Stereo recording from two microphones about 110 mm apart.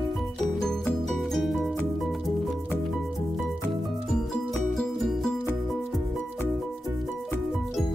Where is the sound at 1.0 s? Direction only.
Centre (ahead or behind).